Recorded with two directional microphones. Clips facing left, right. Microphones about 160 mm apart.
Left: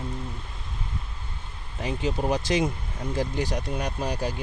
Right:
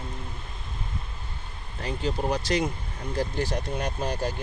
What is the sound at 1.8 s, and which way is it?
Speech, 15° left (ahead or behind).